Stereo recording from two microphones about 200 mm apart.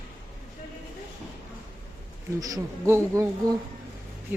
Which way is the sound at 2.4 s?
15° right (ahead or behind).